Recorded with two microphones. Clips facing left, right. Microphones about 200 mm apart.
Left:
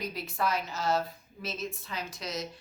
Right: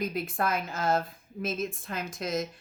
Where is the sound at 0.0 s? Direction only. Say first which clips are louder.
Right 3 dB; 50° right (ahead or behind).